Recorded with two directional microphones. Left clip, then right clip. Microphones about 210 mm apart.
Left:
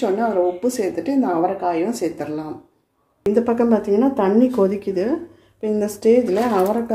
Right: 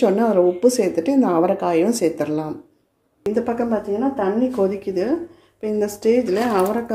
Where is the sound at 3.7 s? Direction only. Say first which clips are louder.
Left 4 dB; 25° left (ahead or behind).